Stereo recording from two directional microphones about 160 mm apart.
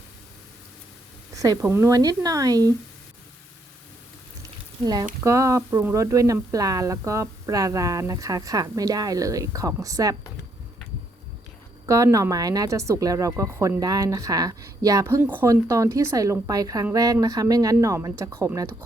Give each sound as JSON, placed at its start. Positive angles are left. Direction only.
{"t": 1.4, "sound": "speech", "side_deg": -20}
{"t": 5.2, "sound": "speech", "side_deg": -20}
{"t": 11.9, "sound": "speech", "side_deg": -20}